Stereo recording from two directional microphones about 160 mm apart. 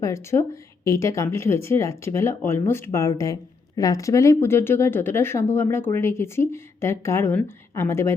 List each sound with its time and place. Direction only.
0.0 s speech: 15° left (ahead or behind)